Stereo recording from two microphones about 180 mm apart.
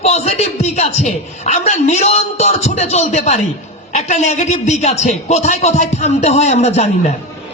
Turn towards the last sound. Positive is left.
turn(degrees=35)  # may be behind; listen again after turning